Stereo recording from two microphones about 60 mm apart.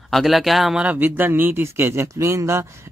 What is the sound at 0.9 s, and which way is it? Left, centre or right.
Speech, right.